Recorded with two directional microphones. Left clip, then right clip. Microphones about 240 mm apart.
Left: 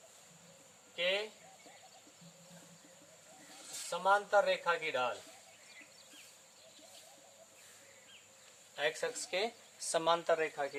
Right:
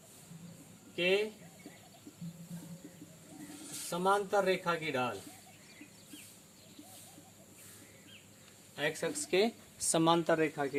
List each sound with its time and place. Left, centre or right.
0.9 s speech: centre
3.8 s speech: centre
8.7 s speech: centre
9.3 s speech: right